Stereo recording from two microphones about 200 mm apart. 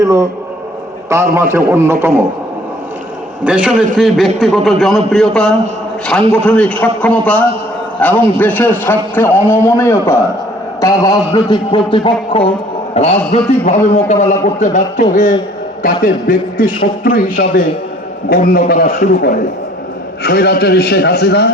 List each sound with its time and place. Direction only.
0.0 s a man's voice: 15° right (ahead or behind)
3.4 s a man's voice: 5° right (ahead or behind); by 21.5 s 55° left (ahead or behind)